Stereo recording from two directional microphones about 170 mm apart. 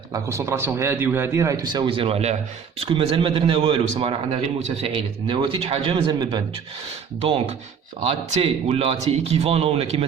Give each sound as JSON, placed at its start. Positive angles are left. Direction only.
{"t": 0.1, "sound": "a man's voice", "side_deg": -15}